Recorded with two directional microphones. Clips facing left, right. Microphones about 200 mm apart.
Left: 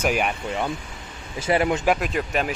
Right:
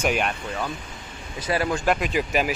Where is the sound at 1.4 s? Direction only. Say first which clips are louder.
Left 3 dB; 20° left (ahead or behind).